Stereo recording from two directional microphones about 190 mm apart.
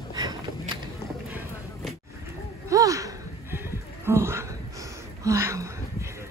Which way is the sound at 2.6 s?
15° right (ahead or behind).